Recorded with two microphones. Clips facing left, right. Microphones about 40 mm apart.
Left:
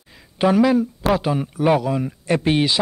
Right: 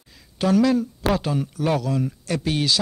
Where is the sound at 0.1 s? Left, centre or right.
Left.